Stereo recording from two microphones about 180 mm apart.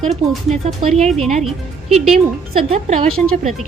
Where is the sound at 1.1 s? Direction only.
Centre (ahead or behind).